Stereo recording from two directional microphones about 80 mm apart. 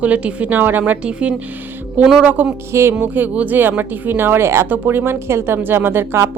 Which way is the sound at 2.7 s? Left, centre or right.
Right.